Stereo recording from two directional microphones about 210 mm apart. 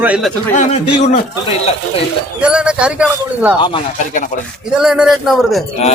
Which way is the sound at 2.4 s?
5° right (ahead or behind).